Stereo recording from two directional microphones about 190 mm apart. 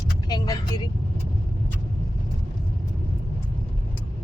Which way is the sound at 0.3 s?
20° left (ahead or behind).